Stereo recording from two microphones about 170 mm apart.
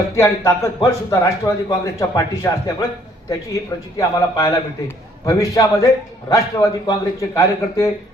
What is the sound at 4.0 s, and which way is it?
A man's voice, 20° left (ahead or behind).